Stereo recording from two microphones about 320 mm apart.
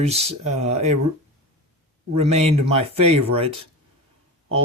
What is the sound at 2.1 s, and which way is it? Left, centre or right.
Speech, centre.